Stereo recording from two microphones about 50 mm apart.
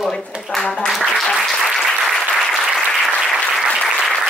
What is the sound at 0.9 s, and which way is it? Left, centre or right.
Speech, centre.